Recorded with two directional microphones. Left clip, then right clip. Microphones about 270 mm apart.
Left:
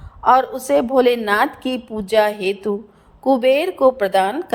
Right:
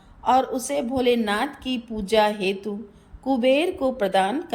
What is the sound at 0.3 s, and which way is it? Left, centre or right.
A woman's voice, centre.